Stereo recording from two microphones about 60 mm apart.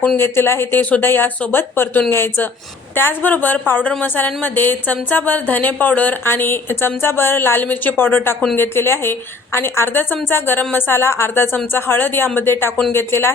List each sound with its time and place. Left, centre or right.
0.2 s speech: left
0.8 s speech: left
1.0 s speech: left